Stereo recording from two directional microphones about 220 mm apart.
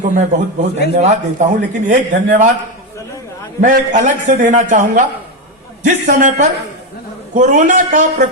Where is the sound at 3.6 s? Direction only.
35° right (ahead or behind).